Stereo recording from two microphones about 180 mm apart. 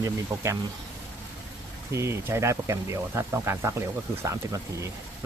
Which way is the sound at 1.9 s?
15° right (ahead or behind).